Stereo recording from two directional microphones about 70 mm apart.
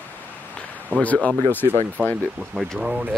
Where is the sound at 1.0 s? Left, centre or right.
Left.